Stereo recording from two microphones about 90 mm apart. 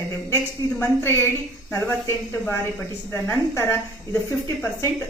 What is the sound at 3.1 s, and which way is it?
Speech, 25° left (ahead or behind).